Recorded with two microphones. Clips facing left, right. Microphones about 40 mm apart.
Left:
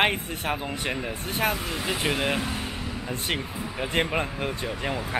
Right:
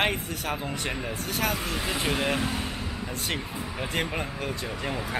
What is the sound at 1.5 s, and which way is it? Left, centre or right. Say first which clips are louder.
Speech: left 1 dB; centre.